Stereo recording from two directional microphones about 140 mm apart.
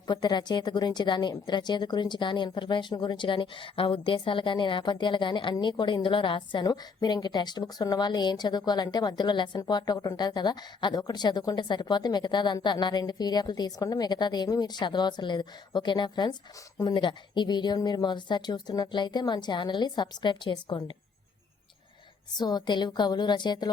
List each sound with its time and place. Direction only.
0.1 s a woman's voice: 30° left (ahead or behind)
22.4 s a woman's voice: 30° left (ahead or behind)